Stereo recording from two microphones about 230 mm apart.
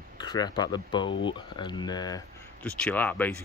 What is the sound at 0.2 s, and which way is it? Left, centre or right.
Speech, centre.